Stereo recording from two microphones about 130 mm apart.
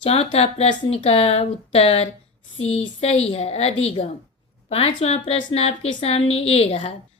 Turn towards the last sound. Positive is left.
turn(degrees=50)  # may be behind; listen again after turning